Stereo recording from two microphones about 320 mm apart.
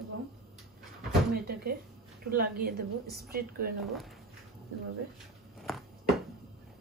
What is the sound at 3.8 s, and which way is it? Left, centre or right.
Speech, centre.